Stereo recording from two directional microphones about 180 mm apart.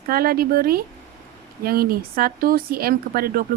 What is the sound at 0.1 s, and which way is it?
Speech, 55° right (ahead or behind).